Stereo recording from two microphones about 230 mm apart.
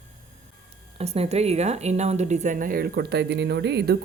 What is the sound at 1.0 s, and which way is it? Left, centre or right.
Speech, right.